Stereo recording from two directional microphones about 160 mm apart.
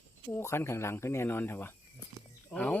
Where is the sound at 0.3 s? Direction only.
15° left (ahead or behind).